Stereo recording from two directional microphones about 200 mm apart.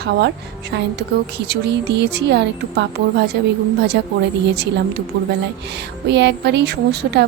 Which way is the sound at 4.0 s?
55° right (ahead or behind).